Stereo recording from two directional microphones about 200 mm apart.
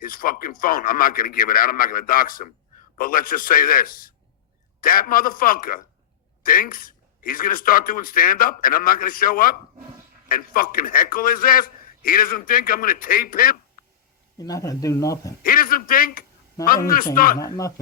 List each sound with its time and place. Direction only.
0.0 s a man's voice: 45° left (ahead or behind)
14.3 s speech: 20° left (ahead or behind)
15.4 s a man's voice: 45° left (ahead or behind)